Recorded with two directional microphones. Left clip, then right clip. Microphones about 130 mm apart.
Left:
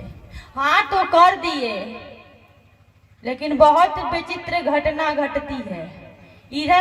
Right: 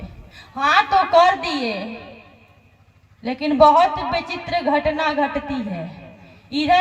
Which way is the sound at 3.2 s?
35° left (ahead or behind).